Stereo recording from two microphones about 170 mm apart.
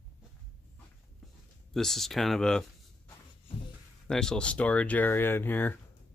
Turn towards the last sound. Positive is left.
turn(degrees=10)  # may be behind; listen again after turning